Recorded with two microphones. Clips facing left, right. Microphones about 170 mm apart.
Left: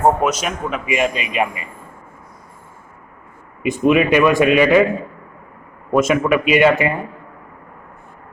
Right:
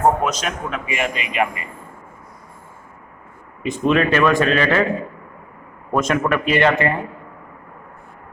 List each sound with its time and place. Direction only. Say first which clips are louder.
0.2 s speech: left 3 dB; 10° left (ahead or behind)
3.6 s speech: left 3 dB; 10° left (ahead or behind)
5.9 s speech: left 4 dB; 5° left (ahead or behind)